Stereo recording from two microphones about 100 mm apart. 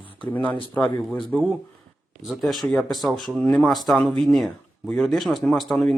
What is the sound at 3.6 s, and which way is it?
Speech, centre (ahead or behind).